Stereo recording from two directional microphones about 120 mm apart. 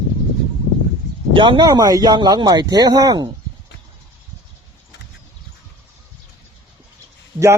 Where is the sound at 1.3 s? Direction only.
45° right (ahead or behind).